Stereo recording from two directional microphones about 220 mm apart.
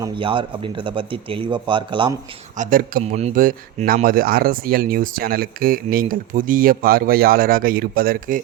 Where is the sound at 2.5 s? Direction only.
35° right (ahead or behind).